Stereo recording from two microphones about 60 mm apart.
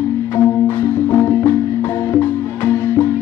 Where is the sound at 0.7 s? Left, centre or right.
Left.